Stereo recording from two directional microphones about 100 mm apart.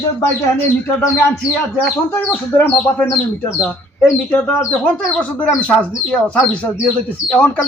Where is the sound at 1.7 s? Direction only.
20° left (ahead or behind).